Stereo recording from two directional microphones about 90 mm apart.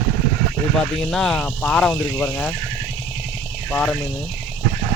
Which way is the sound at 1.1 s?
5° left (ahead or behind).